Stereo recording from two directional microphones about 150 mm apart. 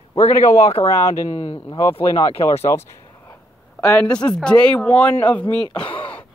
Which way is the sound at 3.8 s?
10° left (ahead or behind).